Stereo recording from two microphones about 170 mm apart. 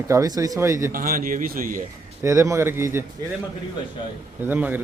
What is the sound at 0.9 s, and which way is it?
Speech, 60° right (ahead or behind).